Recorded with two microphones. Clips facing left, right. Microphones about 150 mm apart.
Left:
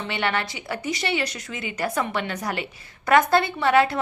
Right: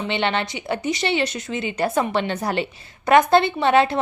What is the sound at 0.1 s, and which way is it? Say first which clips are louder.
A woman's voice: right 2 dB; 25° right (ahead or behind).